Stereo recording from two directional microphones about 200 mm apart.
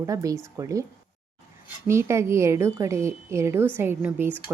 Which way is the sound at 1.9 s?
15° right (ahead or behind).